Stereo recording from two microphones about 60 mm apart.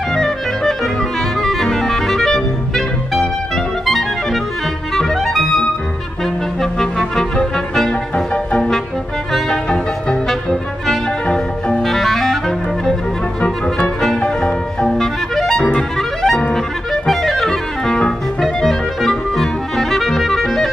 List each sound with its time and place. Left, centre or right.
0.1 s clarinet: centre
1.4 s music: centre
9.3 s music: centre
11.8 s clarinet: centre
14.2 s music: centre